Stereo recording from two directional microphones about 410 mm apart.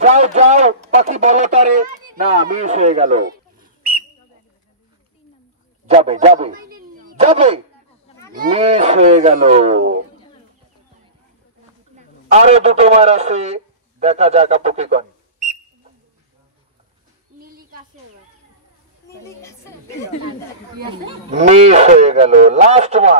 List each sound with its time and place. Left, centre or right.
0.0 s speech: centre
5.9 s speech: centre
12.3 s a man's voice: centre
20.8 s speech: centre